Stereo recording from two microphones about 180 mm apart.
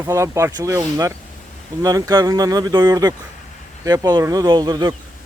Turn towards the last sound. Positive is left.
turn(degrees=-20)  # may be behind; listen again after turning